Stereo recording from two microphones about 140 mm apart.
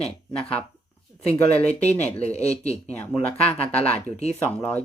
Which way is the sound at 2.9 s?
10° left (ahead or behind).